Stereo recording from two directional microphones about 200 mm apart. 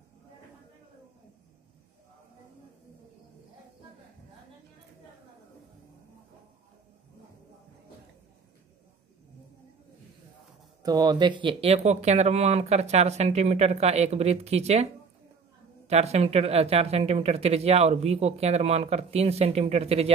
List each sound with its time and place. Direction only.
10.8 s speech: 20° right (ahead or behind)
15.9 s speech: 30° right (ahead or behind)